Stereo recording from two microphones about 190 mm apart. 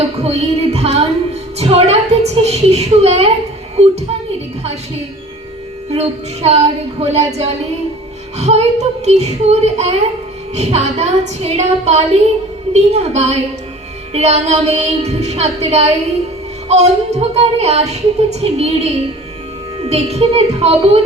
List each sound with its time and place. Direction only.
0.2 s music: 35° right (ahead or behind)
4.3 s music: 35° right (ahead or behind)
5.9 s music: 35° right (ahead or behind)